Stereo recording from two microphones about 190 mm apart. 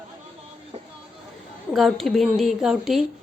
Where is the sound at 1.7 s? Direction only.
Centre (ahead or behind).